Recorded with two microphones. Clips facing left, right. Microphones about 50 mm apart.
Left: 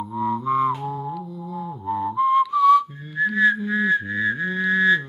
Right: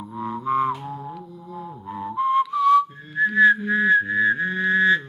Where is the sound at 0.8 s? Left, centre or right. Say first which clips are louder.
Left 5 dB; centre.